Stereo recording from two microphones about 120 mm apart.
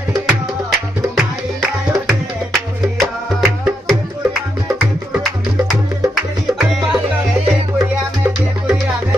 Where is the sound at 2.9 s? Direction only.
Centre (ahead or behind).